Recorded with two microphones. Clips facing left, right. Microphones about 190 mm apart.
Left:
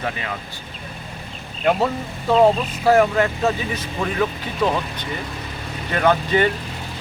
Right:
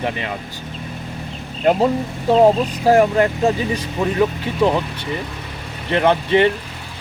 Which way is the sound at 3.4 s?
20° right (ahead or behind).